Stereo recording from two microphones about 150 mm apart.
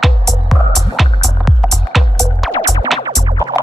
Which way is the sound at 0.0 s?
Centre (ahead or behind).